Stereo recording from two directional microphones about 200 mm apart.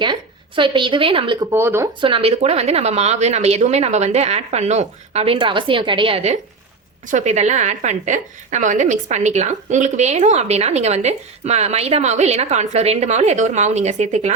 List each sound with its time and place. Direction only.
0.0 s a woman's voice: 25° right (ahead or behind)
1.5 s speech: 10° right (ahead or behind)
2.0 s a woman's voice: 25° right (ahead or behind)